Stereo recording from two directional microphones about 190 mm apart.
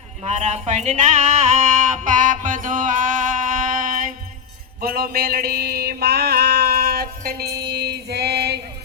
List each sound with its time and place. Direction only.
0.3 s music: 35° right (ahead or behind)
4.8 s mantra: 50° right (ahead or behind)